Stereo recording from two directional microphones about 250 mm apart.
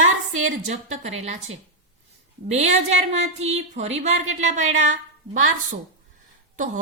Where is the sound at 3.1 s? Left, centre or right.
Right.